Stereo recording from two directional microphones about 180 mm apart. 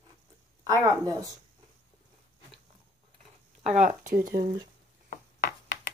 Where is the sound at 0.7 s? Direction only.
20° right (ahead or behind).